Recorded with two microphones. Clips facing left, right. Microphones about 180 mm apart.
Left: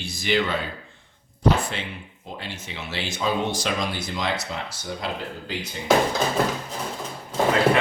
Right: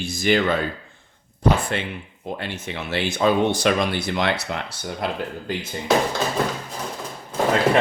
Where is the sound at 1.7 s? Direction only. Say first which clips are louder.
Right 6 dB; 55° right (ahead or behind).